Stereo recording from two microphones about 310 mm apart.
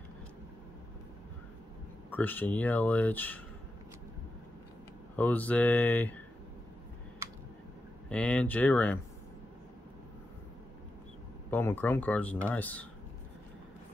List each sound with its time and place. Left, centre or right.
2.0 s speech: centre
5.1 s speech: centre
7.2 s a sound: centre
8.1 s speech: centre
11.5 s speech: centre